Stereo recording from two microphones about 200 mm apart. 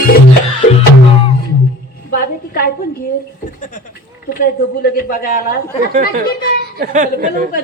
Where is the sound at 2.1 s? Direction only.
45° left (ahead or behind).